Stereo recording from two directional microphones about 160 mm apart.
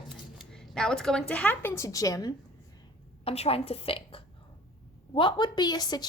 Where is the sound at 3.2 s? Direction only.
40° left (ahead or behind).